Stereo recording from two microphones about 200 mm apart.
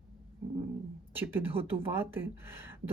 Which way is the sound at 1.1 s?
10° right (ahead or behind).